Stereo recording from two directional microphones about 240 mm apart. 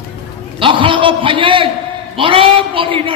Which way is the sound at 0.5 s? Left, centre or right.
Right.